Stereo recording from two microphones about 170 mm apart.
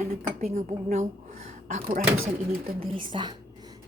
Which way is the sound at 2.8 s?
30° right (ahead or behind).